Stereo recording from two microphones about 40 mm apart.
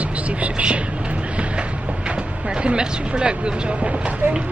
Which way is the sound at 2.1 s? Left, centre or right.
Right.